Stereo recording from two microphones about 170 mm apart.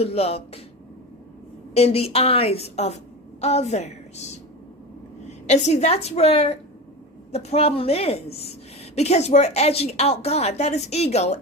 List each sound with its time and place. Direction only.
0.0 s a woman's voice: 35° left (ahead or behind)
1.7 s a woman's voice: 35° left (ahead or behind)
5.5 s a woman's voice: 40° left (ahead or behind)